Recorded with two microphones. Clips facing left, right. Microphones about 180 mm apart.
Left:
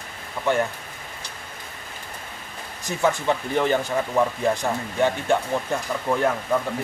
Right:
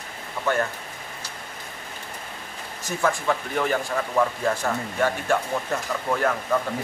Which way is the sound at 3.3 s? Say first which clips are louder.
Left 3 dB; 25° left (ahead or behind).